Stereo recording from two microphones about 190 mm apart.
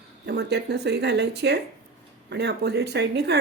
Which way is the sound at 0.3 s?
60° right (ahead or behind).